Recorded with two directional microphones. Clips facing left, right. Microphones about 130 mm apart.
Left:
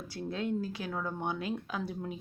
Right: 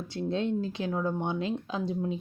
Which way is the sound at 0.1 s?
25° right (ahead or behind).